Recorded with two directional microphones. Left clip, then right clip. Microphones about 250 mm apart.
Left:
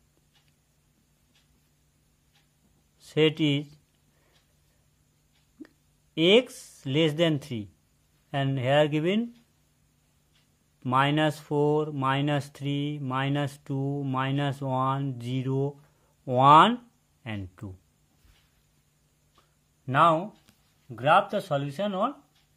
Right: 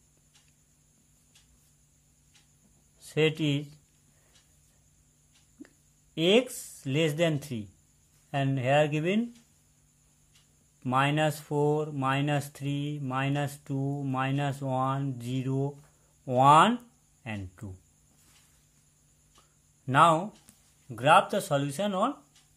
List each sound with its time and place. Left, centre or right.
3.0 s speech: centre
6.1 s speech: left
10.8 s speech: centre
19.9 s speech: centre